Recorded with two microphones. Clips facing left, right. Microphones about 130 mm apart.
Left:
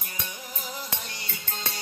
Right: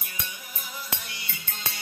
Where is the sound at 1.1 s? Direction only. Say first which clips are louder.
Left 3 dB; 50° left (ahead or behind).